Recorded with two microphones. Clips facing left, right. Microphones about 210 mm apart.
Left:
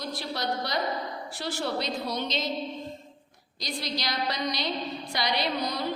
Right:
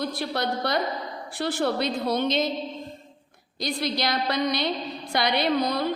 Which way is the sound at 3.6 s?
55° right (ahead or behind).